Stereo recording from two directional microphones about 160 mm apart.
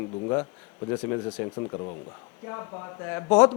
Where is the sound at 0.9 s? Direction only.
15° left (ahead or behind).